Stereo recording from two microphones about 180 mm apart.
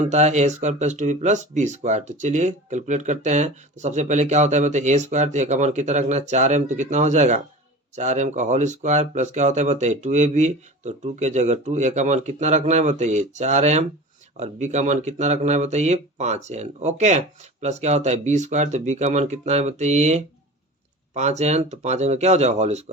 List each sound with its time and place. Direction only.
0.0 s speech: 40° right (ahead or behind)